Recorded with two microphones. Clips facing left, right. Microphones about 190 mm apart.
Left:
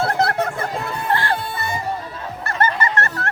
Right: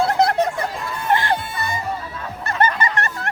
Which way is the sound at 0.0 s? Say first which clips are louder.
Right 2 dB; 15° right (ahead or behind).